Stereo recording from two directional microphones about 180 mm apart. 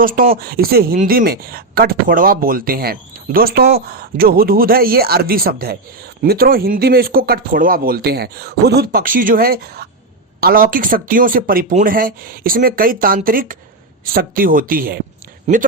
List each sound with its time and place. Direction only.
0.0 s speech: 50° right (ahead or behind)
15.5 s speech: 35° right (ahead or behind)